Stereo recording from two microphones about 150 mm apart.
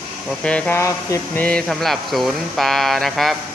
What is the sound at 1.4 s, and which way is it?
Speech, 5° left (ahead or behind).